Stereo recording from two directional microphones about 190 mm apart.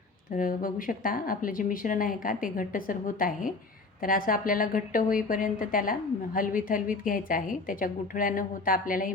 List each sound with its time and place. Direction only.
0.3 s a woman's voice: 45° left (ahead or behind)